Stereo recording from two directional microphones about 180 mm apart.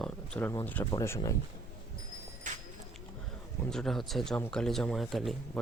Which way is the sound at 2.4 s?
45° right (ahead or behind).